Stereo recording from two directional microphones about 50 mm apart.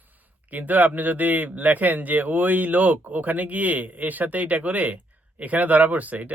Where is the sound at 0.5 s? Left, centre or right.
Right.